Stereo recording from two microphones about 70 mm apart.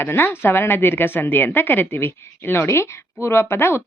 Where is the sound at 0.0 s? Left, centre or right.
Left.